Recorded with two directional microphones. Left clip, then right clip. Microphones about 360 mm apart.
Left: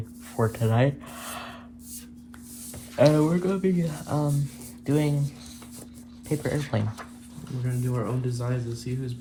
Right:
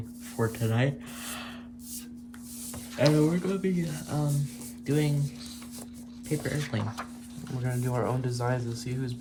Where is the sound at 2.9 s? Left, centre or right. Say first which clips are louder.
Left 4 dB; centre.